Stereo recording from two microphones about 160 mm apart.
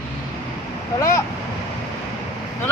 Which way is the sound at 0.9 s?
20° left (ahead or behind).